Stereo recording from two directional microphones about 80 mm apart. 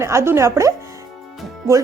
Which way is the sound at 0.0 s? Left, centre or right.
Right.